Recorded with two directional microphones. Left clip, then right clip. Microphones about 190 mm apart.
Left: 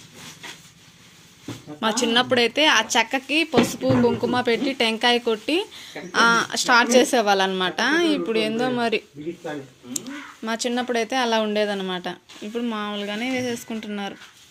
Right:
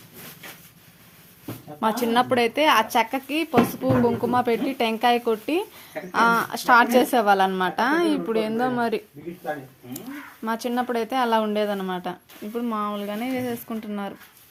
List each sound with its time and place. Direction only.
1.8 s a woman's voice: 25° right (ahead or behind)
10.4 s a woman's voice: 20° right (ahead or behind)